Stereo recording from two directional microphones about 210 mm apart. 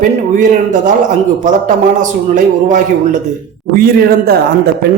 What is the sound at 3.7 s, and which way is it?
A man's voice, 45° right (ahead or behind).